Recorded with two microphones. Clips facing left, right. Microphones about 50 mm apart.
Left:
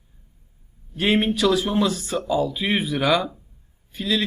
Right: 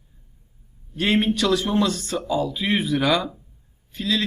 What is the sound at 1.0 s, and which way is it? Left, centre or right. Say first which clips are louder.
A man's voice: even; centre.